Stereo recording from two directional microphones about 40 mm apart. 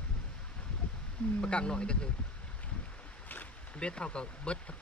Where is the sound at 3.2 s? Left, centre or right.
Left.